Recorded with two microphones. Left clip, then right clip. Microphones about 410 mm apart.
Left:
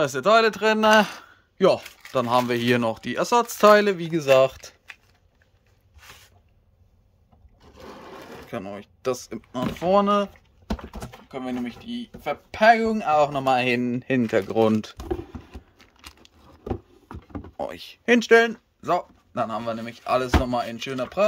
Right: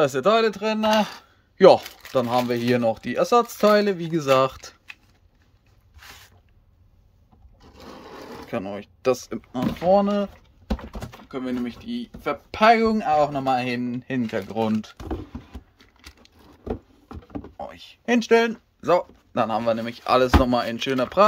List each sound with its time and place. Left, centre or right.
0.0 s speech: centre
1.6 s speech: centre
7.7 s sewing machine: centre
9.8 s speech: centre
15.8 s a sound: centre
17.6 s speech: centre